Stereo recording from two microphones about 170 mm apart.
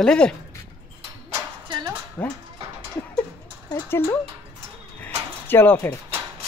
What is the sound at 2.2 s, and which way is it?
Speech, 10° left (ahead or behind).